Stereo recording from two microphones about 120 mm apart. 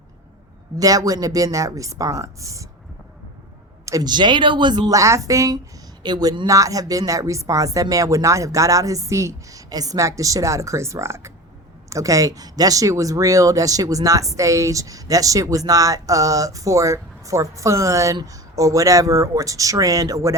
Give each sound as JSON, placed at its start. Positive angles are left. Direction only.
{"t": 0.8, "sound": "speech", "side_deg": -30}
{"t": 3.8, "sound": "speech", "side_deg": -30}